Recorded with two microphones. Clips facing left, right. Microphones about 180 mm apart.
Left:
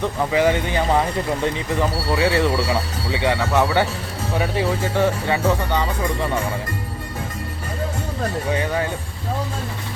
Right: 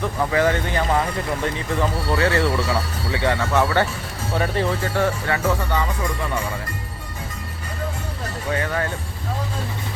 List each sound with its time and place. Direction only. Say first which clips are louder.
0.3 s speech: left 2 dB; 15° left (ahead or behind)
1.8 s speech: left 1 dB; 15° left (ahead or behind)
8.4 s speech: right 1 dB; 15° left (ahead or behind)